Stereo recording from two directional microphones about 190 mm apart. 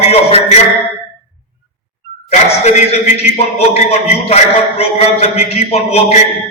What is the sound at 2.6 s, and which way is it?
A man's voice, 35° left (ahead or behind).